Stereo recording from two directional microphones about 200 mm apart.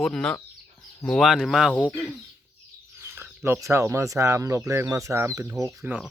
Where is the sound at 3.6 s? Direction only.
15° right (ahead or behind).